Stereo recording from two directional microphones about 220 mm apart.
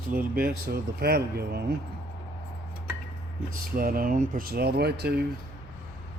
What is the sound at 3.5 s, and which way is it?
Speech, 40° right (ahead or behind).